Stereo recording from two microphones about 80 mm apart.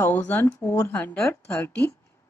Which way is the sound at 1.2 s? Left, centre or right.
Left.